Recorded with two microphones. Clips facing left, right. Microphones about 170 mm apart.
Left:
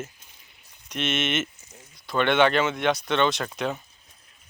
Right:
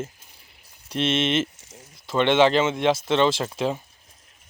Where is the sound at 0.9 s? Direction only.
30° right (ahead or behind).